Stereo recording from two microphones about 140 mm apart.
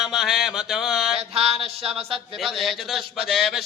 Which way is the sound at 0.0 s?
Centre (ahead or behind).